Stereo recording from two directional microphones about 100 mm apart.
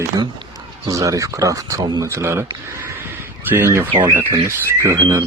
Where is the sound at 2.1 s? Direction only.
25° right (ahead or behind).